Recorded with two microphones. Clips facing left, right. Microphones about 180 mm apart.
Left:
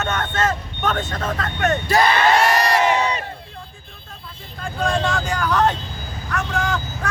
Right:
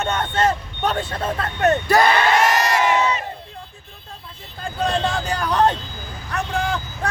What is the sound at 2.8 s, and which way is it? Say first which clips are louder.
Crowd: even; 35° left (ahead or behind).